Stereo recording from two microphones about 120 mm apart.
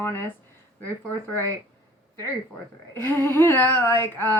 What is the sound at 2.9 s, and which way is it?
A woman's voice, 20° left (ahead or behind).